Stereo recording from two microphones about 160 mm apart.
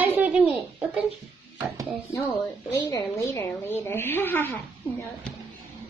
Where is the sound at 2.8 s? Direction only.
20° left (ahead or behind).